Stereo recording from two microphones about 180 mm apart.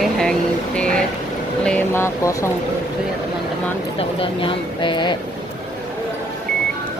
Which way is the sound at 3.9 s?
30° left (ahead or behind).